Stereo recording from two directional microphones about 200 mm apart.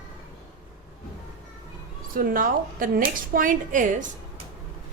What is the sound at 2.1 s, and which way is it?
A woman's voice, 45° right (ahead or behind).